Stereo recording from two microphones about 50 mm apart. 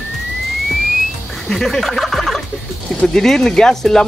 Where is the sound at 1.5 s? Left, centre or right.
Centre.